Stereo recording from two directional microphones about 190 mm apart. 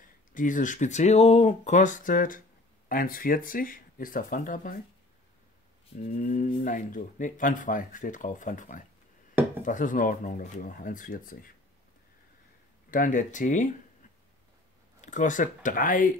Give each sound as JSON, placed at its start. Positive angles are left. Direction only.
{"t": 0.0, "sound": "speech", "side_deg": 45}
{"t": 5.9, "sound": "speech", "side_deg": 40}
{"t": 12.9, "sound": "speech", "side_deg": 45}
{"t": 15.0, "sound": "speech", "side_deg": 40}